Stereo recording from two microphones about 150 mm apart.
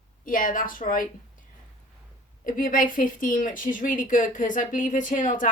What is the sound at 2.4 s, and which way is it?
A woman's voice, 65° left (ahead or behind).